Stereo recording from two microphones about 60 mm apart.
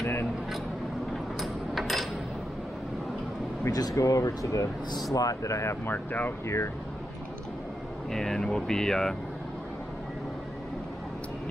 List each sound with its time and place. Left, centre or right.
0.0 s a sound: left
1.1 s a sound: centre
3.7 s speech: left
5.9 s speech: left
6.4 s speech: left
8.1 s speech: centre